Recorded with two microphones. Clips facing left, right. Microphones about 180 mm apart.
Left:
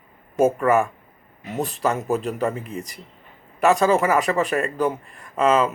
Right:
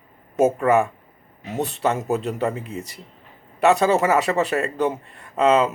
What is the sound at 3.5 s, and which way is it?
Speech, 30° right (ahead or behind).